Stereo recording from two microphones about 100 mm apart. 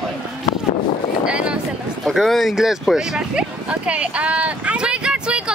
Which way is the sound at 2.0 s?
Centre (ahead or behind).